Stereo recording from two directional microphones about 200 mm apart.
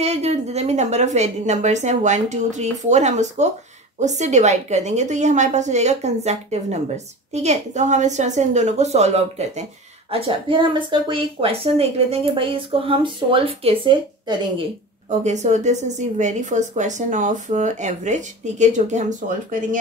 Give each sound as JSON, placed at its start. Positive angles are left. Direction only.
{"t": 0.0, "sound": "a woman's voice", "side_deg": -35}
{"t": 15.0, "sound": "a woman's voice", "side_deg": -35}